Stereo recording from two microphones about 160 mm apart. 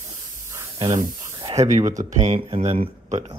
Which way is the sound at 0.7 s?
25° right (ahead or behind).